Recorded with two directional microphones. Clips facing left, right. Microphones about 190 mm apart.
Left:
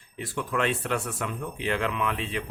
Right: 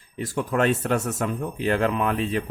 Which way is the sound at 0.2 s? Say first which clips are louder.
Right 5 dB; 40° right (ahead or behind).